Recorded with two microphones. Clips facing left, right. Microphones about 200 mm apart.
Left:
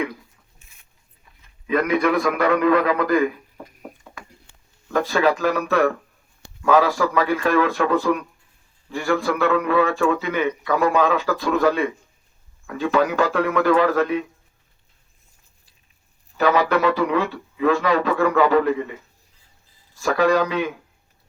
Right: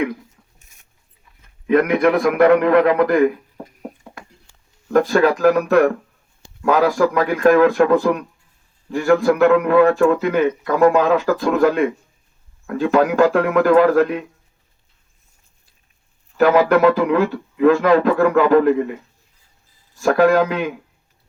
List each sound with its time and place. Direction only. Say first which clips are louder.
1.4 s a man's voice: right 6 dB; 55° right (ahead or behind)
4.9 s a man's voice: right 5 dB; 55° right (ahead or behind)
16.4 s a man's voice: right 5 dB; 50° right (ahead or behind)
20.0 s a man's voice: right 4 dB; 50° right (ahead or behind)